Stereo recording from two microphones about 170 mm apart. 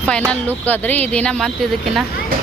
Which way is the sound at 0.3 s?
10° left (ahead or behind).